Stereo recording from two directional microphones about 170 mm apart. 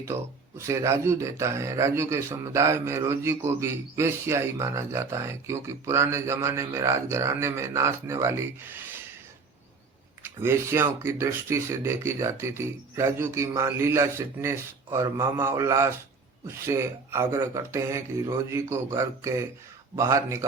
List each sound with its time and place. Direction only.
0.0 s speech: 15° right (ahead or behind)
10.2 s speech: 15° right (ahead or behind)